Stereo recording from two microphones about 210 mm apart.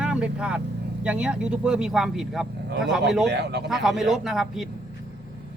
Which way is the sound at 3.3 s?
55° right (ahead or behind).